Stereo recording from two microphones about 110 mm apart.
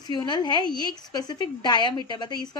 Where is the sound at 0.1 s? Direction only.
40° left (ahead or behind).